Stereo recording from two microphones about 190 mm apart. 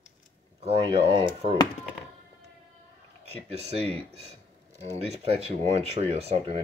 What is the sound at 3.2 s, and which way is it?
Speech, 35° right (ahead or behind).